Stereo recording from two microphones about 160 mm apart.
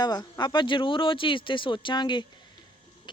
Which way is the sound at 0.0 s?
25° left (ahead or behind).